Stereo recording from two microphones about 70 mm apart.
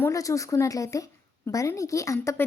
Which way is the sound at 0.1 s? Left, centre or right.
Left.